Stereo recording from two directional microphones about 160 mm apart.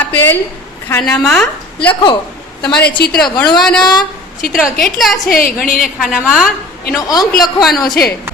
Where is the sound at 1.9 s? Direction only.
30° left (ahead or behind).